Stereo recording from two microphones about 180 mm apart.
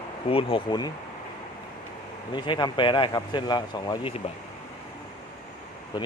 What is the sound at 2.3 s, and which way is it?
Speech, 25° left (ahead or behind).